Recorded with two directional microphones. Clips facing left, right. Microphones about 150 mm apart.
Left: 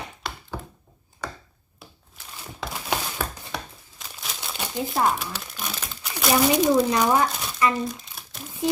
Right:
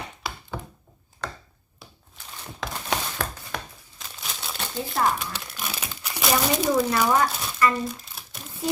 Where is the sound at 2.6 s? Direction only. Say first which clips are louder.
Even; 5° left (ahead or behind).